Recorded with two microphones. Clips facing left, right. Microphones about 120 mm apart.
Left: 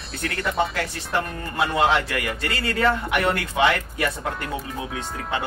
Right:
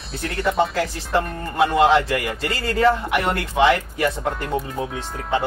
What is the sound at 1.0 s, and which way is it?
Speech, centre (ahead or behind).